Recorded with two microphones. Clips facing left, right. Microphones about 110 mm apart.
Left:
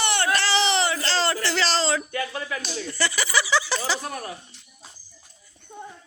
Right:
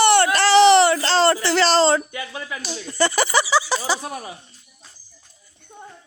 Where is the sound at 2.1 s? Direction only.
15° right (ahead or behind).